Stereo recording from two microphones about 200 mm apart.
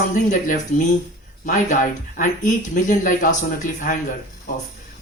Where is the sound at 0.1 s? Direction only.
40° left (ahead or behind).